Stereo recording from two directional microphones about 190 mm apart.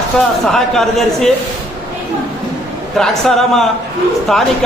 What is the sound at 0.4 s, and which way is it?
Speech, centre (ahead or behind).